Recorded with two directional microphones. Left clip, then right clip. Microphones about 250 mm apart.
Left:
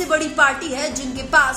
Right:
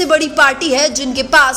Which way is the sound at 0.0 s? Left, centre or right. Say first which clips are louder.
Right 6 dB; right.